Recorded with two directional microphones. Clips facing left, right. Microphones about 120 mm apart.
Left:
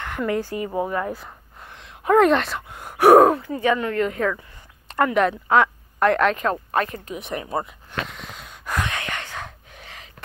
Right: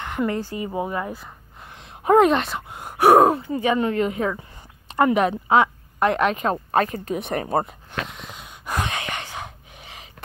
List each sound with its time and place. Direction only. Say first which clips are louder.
0.0 s a sound: right 3 dB; 15° right (ahead or behind)
0.7 s speech: left 2 dB; 10° right (ahead or behind)
1.8 s a sound: right 2 dB; 35° right (ahead or behind)
2.1 s speech: even; 5° right (ahead or behind)
3.3 s speech: left 1 dB; 25° right (ahead or behind)
6.7 s speech: right 3 dB; 30° right (ahead or behind)
7.1 s speech: right 5 dB; 50° right (ahead or behind)
7.4 s speech: right 4 dB; 40° right (ahead or behind)
8.1 s gasp: even; 10° right (ahead or behind)
8.6 s gasp: even; 25° right (ahead or behind)